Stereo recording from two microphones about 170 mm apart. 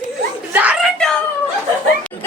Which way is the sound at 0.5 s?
10° right (ahead or behind).